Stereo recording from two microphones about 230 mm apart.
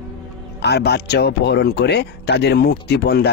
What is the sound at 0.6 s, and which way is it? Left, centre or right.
Speech, left.